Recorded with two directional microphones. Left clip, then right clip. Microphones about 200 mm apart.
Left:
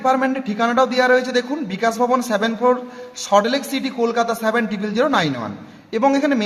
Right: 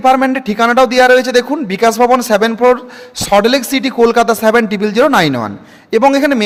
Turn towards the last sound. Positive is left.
turn(degrees=-45)  # may be behind; listen again after turning